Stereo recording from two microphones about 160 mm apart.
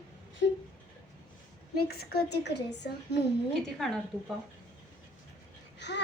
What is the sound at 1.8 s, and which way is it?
A woman's voice, 75° left (ahead or behind).